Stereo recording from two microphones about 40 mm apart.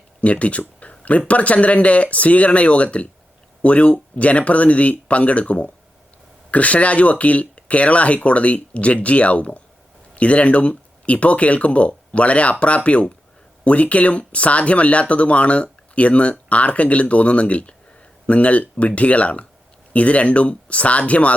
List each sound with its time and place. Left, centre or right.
0.2 s speech: left
0.8 s a sound: left
1.3 s speech: left